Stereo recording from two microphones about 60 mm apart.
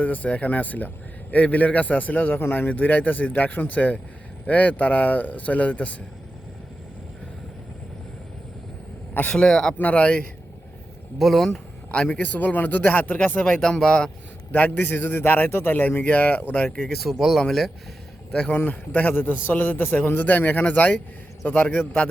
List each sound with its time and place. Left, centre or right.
0.0 s speech: left
9.3 s speech: centre
9.7 s speech: left
11.2 s speech: centre
11.9 s speech: left
13.7 s speech: centre
14.5 s a man's voice: left
17.0 s speech: centre
18.5 s a man's voice: left